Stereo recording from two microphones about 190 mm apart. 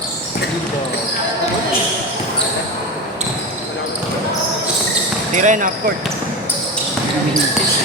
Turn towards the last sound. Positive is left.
turn(degrees=-45)  # may be behind; listen again after turning